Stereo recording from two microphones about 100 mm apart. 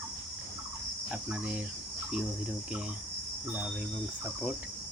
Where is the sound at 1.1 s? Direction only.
10° right (ahead or behind).